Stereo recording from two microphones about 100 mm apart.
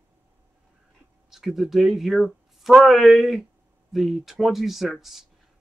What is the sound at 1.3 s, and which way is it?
Speech, 5° right (ahead or behind).